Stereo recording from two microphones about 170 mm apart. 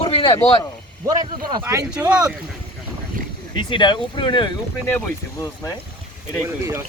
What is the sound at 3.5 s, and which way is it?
Speech, 25° left (ahead or behind).